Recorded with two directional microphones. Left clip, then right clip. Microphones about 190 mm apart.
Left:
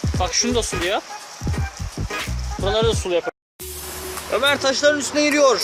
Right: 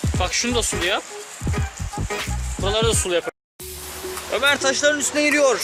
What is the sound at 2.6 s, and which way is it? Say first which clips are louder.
Speech: left 1 dB; 15° left (ahead or behind).